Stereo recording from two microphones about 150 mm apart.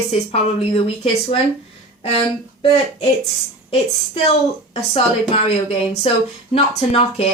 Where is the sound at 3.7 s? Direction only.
40° left (ahead or behind).